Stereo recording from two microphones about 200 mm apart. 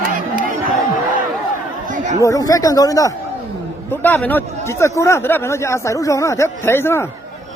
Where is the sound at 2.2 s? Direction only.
15° left (ahead or behind).